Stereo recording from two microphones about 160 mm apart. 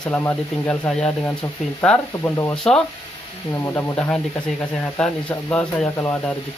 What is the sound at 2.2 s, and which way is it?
Speech, 15° left (ahead or behind).